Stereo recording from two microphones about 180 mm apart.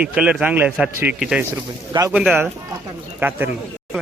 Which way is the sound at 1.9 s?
20° right (ahead or behind).